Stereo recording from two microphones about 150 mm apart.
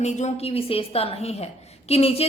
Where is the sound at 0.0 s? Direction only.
50° left (ahead or behind).